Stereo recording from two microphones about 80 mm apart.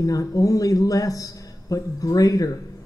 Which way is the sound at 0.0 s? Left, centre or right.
Left.